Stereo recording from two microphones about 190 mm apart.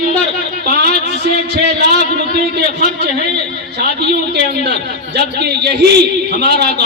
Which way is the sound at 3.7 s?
60° right (ahead or behind).